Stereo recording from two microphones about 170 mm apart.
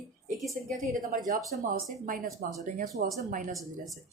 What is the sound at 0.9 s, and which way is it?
Speech, 55° right (ahead or behind).